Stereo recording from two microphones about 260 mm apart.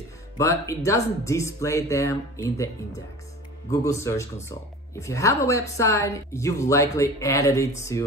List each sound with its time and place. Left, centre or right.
0.4 s speech: centre
3.7 s speech: centre